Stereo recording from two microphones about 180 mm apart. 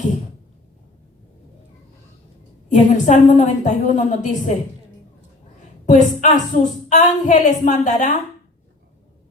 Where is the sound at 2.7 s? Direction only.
45° left (ahead or behind).